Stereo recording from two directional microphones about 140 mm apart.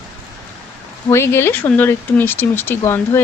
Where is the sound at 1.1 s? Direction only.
15° left (ahead or behind).